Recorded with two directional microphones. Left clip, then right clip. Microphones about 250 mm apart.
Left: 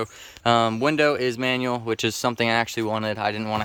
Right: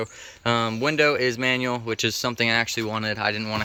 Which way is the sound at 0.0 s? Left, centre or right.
Centre.